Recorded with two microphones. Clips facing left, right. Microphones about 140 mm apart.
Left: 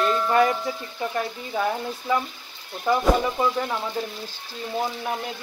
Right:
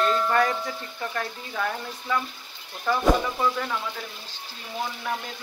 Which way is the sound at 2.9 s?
15° left (ahead or behind).